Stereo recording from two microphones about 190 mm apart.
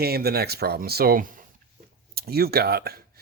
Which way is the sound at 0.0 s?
55° right (ahead or behind).